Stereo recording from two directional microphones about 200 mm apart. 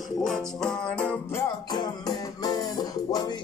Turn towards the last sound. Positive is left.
turn(degrees=20)  # may be behind; listen again after turning